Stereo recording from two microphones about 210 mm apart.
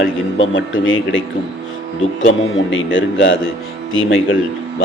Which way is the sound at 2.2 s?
65° left (ahead or behind).